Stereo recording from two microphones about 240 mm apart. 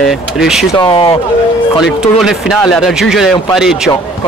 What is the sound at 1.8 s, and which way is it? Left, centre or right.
Speech, centre.